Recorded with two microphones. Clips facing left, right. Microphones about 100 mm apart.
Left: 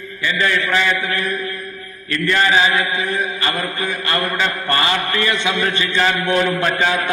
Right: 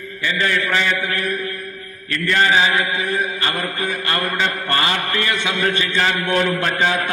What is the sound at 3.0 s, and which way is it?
Mantra, 25° left (ahead or behind).